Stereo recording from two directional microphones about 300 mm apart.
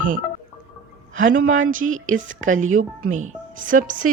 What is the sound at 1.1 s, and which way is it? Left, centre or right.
Speech, right.